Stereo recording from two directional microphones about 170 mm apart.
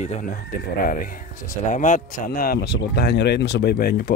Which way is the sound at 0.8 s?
55° left (ahead or behind).